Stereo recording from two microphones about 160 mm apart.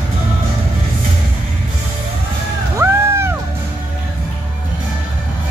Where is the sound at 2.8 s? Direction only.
15° right (ahead or behind).